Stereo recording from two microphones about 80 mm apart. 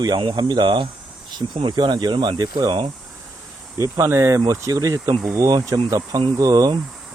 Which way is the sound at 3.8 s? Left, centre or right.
Right.